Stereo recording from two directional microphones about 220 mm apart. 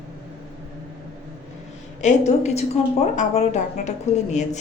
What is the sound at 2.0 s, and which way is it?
A woman's voice, 30° left (ahead or behind).